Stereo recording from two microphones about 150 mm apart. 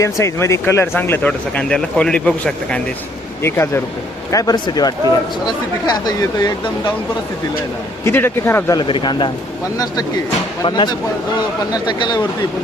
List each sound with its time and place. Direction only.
0.0 s speech: 20° left (ahead or behind)
4.3 s speech: 25° left (ahead or behind)
8.0 s speech: 15° left (ahead or behind)
8.8 s speech: 30° left (ahead or behind)